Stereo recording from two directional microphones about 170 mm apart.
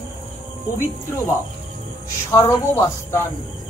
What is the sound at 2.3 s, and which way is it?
Speech, 15° left (ahead or behind).